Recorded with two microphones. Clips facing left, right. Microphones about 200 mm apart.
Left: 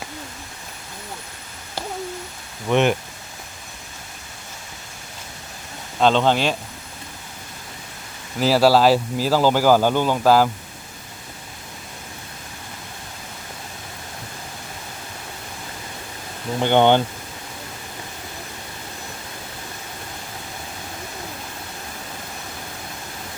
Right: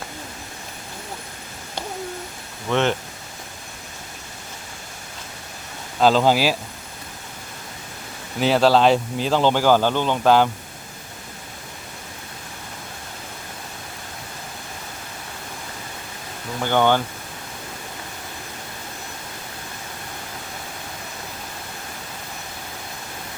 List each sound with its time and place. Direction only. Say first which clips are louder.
2.6 s speech: left 3 dB; 15° left (ahead or behind)
6.0 s speech: right 1 dB; 5° right (ahead or behind)
8.4 s speech: left 1 dB; 5° left (ahead or behind)
16.6 s speech: left 3 dB; 20° left (ahead or behind)